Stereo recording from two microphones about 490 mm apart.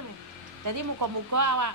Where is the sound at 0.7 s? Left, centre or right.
Right.